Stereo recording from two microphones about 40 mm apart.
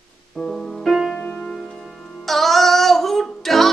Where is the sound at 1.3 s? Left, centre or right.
Centre.